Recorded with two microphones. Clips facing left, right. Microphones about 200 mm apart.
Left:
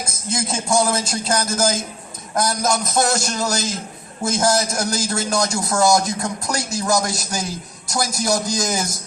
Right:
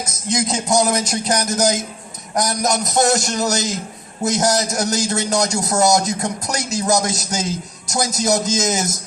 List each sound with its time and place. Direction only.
0.3 s a man's voice: 20° right (ahead or behind)